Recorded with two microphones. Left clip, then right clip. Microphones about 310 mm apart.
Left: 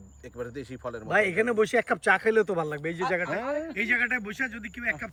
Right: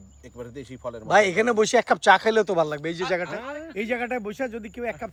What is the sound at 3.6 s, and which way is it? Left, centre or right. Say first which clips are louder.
Speech: left 1 dB; centre.